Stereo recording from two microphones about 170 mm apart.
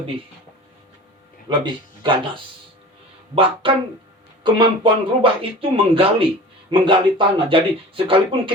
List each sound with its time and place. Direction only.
1.5 s speech: 30° right (ahead or behind)